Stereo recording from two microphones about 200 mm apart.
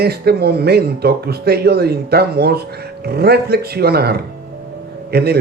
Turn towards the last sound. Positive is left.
turn(degrees=-50)  # may be behind; listen again after turning